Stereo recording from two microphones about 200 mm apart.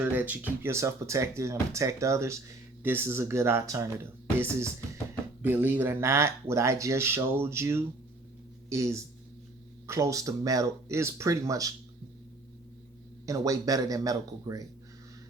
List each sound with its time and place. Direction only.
0.0 s speech: 10° right (ahead or behind)
13.2 s speech: 15° right (ahead or behind)